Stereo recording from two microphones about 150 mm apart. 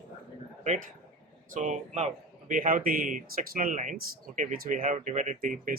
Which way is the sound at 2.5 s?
65° right (ahead or behind).